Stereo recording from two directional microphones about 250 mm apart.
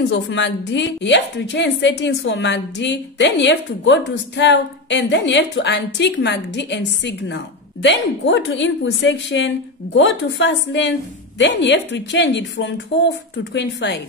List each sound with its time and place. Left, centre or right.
0.1 s a woman's voice: left